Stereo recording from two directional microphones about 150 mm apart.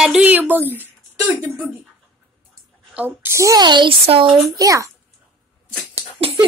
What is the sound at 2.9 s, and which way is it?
A woman's voice, 10° right (ahead or behind).